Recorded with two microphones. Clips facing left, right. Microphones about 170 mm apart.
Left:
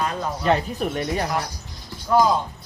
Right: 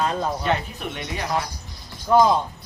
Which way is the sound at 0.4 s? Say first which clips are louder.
Left 4 dB; 40° left (ahead or behind).